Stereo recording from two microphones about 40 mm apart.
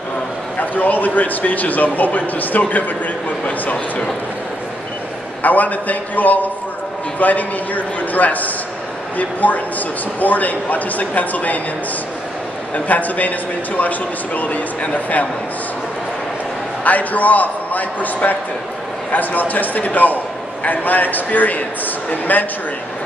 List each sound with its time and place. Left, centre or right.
0.6 s a man's voice: left
5.4 s a man's voice: left
12.7 s a man's voice: left
16.8 s a man's voice: left